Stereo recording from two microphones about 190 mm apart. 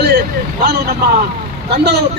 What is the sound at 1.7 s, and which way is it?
Speech, 60° right (ahead or behind).